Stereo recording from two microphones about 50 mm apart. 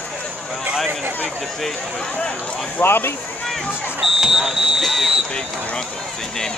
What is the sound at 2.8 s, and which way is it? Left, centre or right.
Speech, left.